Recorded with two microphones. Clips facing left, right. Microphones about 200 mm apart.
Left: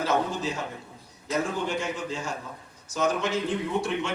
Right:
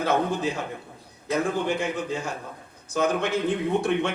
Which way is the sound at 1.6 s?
55° right (ahead or behind).